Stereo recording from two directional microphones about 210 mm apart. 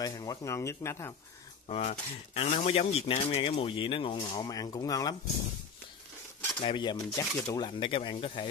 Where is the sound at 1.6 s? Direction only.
30° left (ahead or behind).